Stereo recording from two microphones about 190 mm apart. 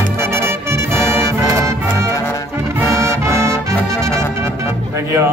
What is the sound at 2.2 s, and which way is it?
Brass instrument, 15° left (ahead or behind).